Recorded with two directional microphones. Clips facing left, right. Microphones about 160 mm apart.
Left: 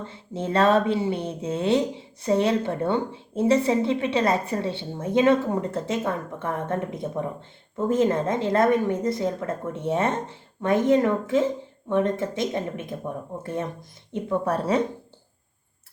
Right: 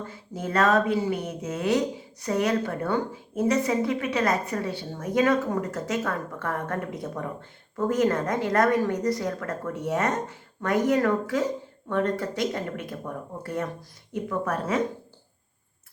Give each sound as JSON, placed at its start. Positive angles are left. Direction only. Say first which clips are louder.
{"t": 0.0, "sound": "a woman's voice", "louder": "left 3 dB", "side_deg": 25}